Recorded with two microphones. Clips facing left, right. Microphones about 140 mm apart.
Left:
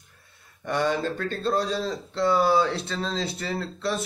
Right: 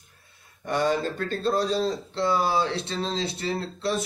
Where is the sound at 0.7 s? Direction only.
35° right (ahead or behind).